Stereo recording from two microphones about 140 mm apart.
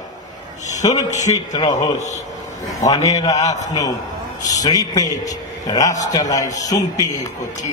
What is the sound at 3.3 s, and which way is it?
Speech, 55° left (ahead or behind).